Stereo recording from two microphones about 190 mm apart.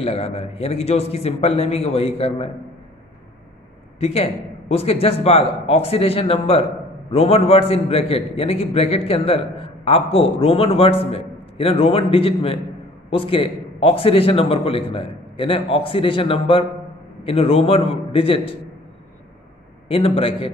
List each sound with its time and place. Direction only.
0.0 s a man's voice: 30° left (ahead or behind)
4.0 s a man's voice: 30° left (ahead or behind)
19.9 s a man's voice: 30° left (ahead or behind)